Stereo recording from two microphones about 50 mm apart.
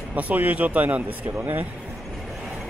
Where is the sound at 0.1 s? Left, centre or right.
Right.